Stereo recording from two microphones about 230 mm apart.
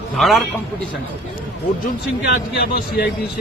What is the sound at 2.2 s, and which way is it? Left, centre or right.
Speech, left.